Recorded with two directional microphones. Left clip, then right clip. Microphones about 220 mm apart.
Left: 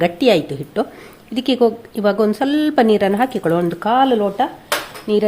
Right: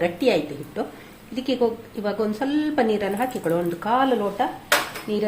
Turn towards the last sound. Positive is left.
turn(degrees=45)  # may be behind; listen again after turning